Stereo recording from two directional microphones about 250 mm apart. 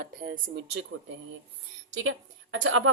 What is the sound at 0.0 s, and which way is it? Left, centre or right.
Speech, right.